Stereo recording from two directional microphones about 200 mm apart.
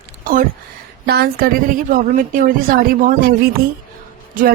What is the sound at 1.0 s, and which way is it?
Speech, 50° right (ahead or behind).